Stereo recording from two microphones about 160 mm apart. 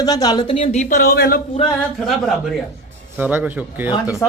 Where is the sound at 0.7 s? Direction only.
50° left (ahead or behind).